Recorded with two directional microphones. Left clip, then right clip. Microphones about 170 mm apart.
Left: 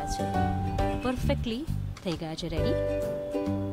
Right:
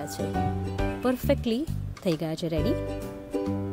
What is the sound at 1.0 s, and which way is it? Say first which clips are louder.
Speech: right 5 dB; 20° right (ahead or behind).